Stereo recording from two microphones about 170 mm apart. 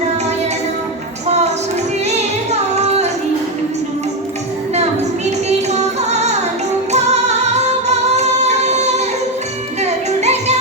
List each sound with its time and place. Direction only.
1.3 s music: 40° right (ahead or behind)
5.5 s carnatic music: 40° right (ahead or behind)
6.9 s music: 40° right (ahead or behind)